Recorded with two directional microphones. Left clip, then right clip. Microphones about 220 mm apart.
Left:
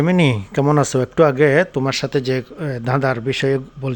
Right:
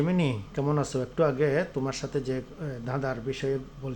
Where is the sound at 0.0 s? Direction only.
40° left (ahead or behind).